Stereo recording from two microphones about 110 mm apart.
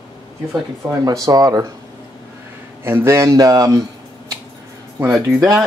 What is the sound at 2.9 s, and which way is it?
Speech, 25° right (ahead or behind).